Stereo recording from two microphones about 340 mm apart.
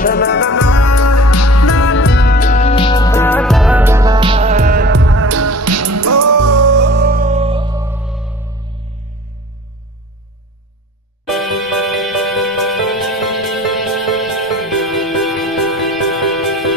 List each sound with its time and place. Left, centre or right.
0.0 s music: left
0.6 s music: left; by 6.5 s right
6.5 s music: right; by 8.5 s centre
11.2 s music: centre